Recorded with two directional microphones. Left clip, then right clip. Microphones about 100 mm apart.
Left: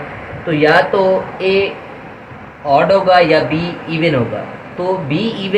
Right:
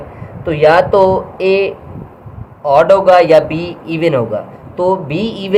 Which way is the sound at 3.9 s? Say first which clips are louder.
Right 2 dB; 30° right (ahead or behind).